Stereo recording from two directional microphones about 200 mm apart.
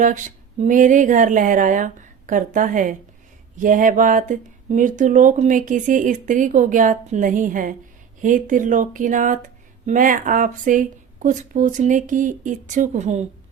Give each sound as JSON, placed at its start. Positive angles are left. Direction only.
{"t": 0.0, "sound": "speech", "side_deg": -40}